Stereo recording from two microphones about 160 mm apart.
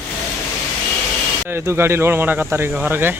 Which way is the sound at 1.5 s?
15° right (ahead or behind).